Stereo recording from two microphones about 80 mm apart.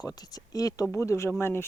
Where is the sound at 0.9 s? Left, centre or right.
Left.